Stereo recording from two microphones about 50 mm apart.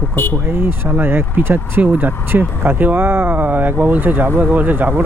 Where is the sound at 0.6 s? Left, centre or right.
Right.